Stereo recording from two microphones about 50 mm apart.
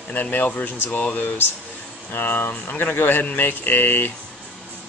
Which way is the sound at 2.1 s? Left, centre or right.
Left.